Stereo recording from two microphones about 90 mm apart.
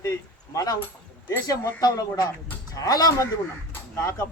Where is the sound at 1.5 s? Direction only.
40° left (ahead or behind).